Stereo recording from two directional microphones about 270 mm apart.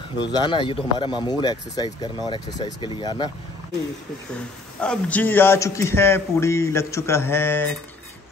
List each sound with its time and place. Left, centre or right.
0.3 s speech: centre
4.8 s speech: centre